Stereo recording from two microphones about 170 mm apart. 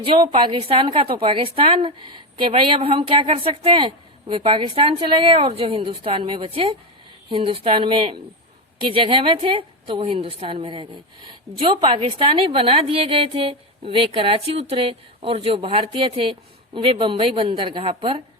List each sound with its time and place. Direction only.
0.0 s a woman's voice: 30° right (ahead or behind)